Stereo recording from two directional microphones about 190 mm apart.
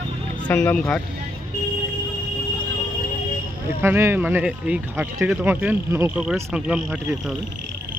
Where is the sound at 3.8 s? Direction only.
15° right (ahead or behind).